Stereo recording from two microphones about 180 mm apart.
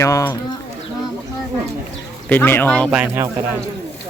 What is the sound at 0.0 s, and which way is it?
Speech, 15° left (ahead or behind).